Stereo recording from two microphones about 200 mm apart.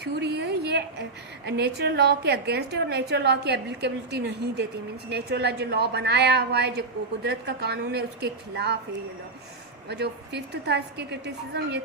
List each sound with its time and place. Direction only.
0.0 s a sound: 55° right (ahead or behind)
1.5 s a woman's voice: 55° right (ahead or behind)
9.9 s a woman's voice: 55° right (ahead or behind)